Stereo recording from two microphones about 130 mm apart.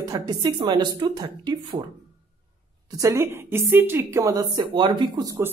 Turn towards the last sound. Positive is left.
turn(degrees=-35)  # may be behind; listen again after turning